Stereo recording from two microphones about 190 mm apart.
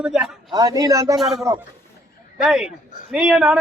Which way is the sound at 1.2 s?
Centre (ahead or behind).